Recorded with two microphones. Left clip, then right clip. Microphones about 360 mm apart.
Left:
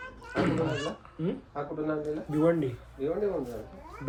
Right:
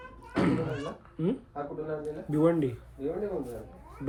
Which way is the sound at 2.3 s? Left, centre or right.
Right.